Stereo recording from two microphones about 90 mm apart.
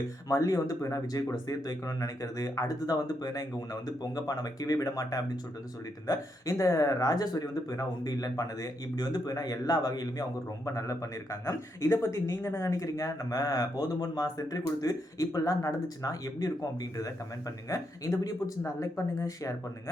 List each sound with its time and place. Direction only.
0.3 s a man's voice: 40° left (ahead or behind)
10.7 s a man's voice: 35° left (ahead or behind)